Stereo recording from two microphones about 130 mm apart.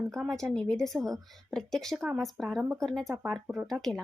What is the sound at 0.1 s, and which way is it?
A woman's voice, centre (ahead or behind).